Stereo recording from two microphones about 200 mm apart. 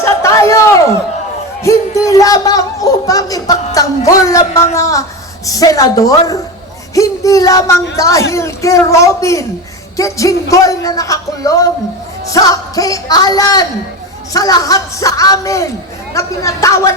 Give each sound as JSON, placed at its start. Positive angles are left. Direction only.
{"t": 0.0, "sound": "a sound", "side_deg": 15}
{"t": 1.6, "sound": "a man's voice", "side_deg": 15}
{"t": 3.8, "sound": "music", "side_deg": 15}